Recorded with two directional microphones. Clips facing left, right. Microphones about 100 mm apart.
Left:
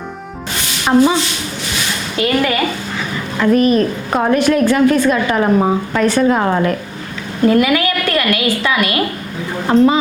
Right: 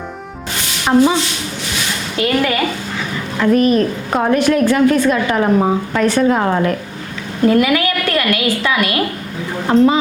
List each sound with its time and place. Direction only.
1.2 s a woman's voice: 20° left (ahead or behind)